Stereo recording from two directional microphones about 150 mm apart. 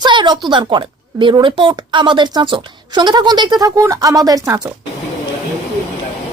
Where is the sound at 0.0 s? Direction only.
30° right (ahead or behind).